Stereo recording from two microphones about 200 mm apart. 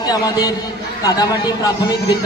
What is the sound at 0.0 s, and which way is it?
A man's voice, 20° left (ahead or behind).